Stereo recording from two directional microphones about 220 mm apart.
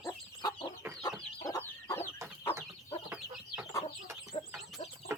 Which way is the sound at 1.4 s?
15° left (ahead or behind).